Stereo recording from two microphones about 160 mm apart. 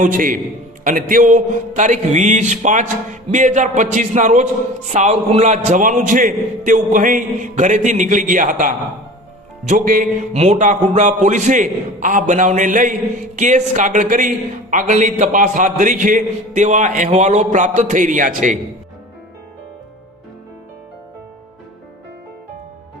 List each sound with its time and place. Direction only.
0.0 s a man's voice: 60° right (ahead or behind)
10.3 s a man's voice: 45° right (ahead or behind)